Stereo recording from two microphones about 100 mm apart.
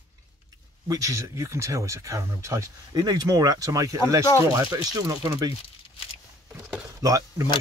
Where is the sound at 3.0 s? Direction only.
40° right (ahead or behind).